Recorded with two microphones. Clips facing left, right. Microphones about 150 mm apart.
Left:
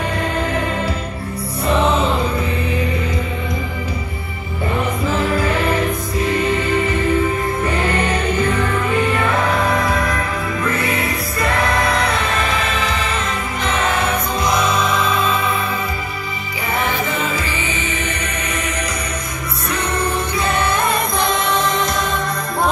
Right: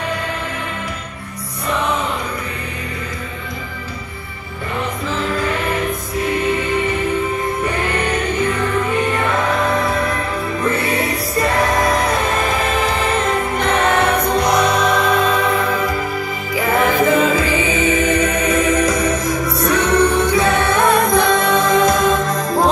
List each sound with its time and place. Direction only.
11.3 s music: 45° right (ahead or behind); by 15.9 s 80° right
16.9 s music: 55° right (ahead or behind)
18.2 s music: 90° right; by 22.7 s 45° right (ahead or behind)